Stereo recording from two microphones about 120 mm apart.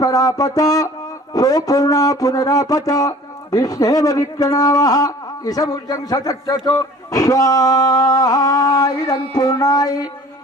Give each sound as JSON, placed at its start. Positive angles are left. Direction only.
{"t": 0.0, "sound": "speech", "side_deg": 30}